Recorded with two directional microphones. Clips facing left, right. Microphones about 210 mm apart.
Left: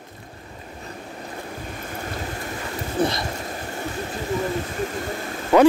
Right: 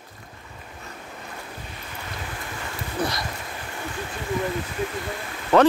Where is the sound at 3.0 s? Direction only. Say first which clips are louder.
Left 5 dB; 25° left (ahead or behind).